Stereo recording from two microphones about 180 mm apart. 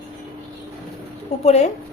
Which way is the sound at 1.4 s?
35° left (ahead or behind).